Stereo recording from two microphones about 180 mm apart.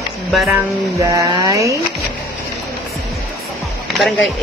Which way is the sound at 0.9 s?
20° right (ahead or behind).